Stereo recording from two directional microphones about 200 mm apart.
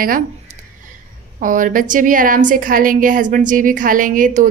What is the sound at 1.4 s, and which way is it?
A woman's voice, 40° right (ahead or behind).